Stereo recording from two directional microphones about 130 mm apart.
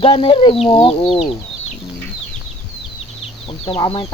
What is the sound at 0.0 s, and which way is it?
Speech, 45° left (ahead or behind).